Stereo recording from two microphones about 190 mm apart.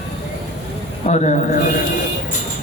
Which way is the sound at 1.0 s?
40° left (ahead or behind).